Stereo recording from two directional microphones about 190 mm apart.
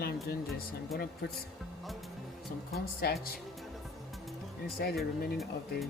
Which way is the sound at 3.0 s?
55° left (ahead or behind).